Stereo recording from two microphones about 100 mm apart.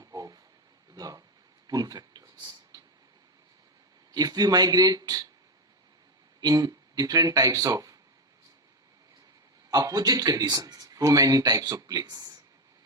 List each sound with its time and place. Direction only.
0.0 s a sound: 35° right (ahead or behind)
0.9 s speech: 35° right (ahead or behind)
1.6 s a sound: 40° right (ahead or behind)
4.1 s speech: 40° right (ahead or behind)
6.4 s speech: 40° right (ahead or behind)
9.6 s speech: 40° right (ahead or behind)